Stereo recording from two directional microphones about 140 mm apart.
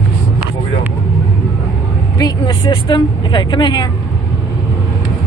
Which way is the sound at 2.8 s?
35° left (ahead or behind).